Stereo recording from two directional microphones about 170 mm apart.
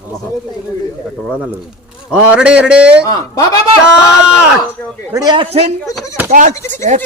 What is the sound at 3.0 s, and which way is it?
Speech, 20° left (ahead or behind).